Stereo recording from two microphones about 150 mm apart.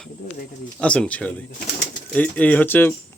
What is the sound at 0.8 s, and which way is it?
A man's voice, 10° left (ahead or behind).